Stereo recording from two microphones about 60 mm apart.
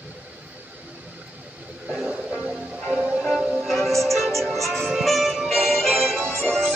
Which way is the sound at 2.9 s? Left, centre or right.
Centre.